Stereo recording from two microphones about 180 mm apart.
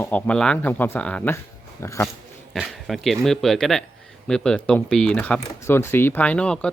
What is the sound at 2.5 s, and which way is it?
Speech, centre (ahead or behind).